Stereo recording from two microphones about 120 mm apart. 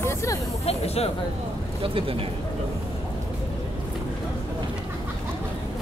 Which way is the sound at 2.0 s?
50° right (ahead or behind).